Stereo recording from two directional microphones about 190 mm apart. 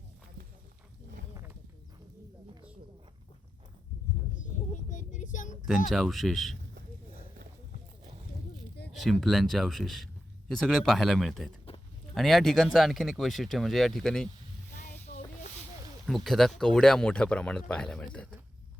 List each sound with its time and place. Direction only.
4.7 s vehicle: 40° left (ahead or behind)
5.9 s speech: centre (ahead or behind)
9.2 s speech: centre (ahead or behind)
16.0 s speech: centre (ahead or behind)